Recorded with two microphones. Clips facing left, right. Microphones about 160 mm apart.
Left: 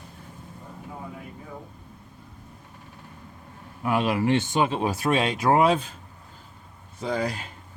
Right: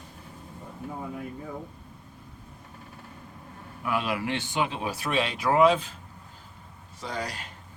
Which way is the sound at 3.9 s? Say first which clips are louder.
Left 6 dB; 45° left (ahead or behind).